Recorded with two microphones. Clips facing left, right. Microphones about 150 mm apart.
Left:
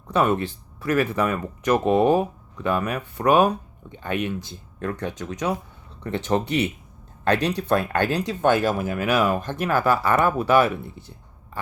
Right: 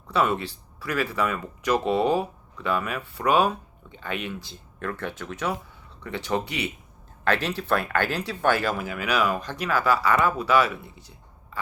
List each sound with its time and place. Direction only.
0.1 s speech: 20° left (ahead or behind)
10.2 s speech: 55° left (ahead or behind)